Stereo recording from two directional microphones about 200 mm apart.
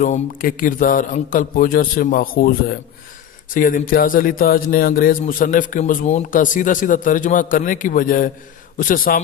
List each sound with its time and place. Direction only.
0.0 s a man's voice: 45° left (ahead or behind)